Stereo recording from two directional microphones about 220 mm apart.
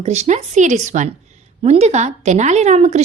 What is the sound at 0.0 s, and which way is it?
Speech, 30° right (ahead or behind).